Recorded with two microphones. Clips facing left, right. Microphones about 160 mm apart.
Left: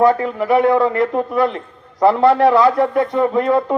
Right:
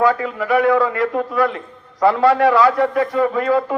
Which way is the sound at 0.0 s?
25° left (ahead or behind).